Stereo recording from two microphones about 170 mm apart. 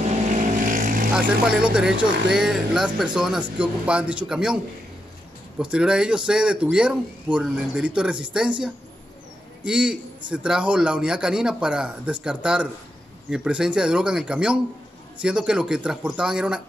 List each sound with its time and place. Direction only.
0.7 s vehicle: 55° right (ahead or behind)
1.1 s a man's voice: 5° right (ahead or behind)
5.6 s a man's voice: 5° right (ahead or behind)